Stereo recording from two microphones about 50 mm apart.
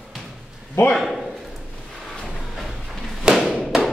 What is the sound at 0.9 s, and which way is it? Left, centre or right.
Speech, centre.